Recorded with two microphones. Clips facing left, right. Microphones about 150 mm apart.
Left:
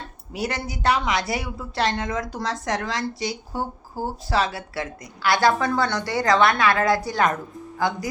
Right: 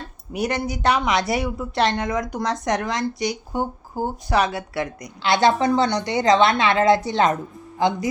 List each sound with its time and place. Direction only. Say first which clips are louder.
0.3 s a woman's voice: right 4 dB; 20° right (ahead or behind)